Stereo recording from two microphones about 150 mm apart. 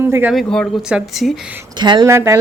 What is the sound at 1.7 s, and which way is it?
Speech, 30° right (ahead or behind).